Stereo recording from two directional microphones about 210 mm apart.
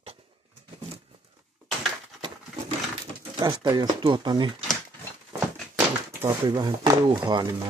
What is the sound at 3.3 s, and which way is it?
Speech, 20° right (ahead or behind).